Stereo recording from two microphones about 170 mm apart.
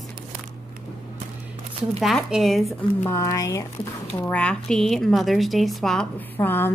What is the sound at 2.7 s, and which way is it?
Speech, 15° left (ahead or behind).